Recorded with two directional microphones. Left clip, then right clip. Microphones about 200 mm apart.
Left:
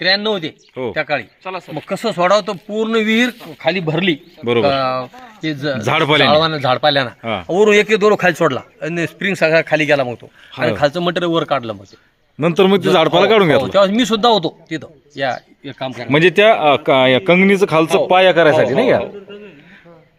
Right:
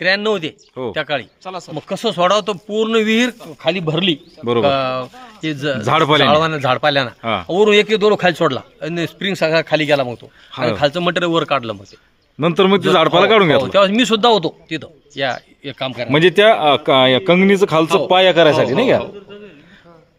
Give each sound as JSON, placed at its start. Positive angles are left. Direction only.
{"t": 0.0, "sound": "a man's voice", "side_deg": -10}
{"t": 7.7, "sound": "a man's voice", "side_deg": -10}
{"t": 9.0, "sound": "a man's voice", "side_deg": 0}
{"t": 15.6, "sound": "speech", "side_deg": -35}
{"t": 16.0, "sound": "a man's voice", "side_deg": 0}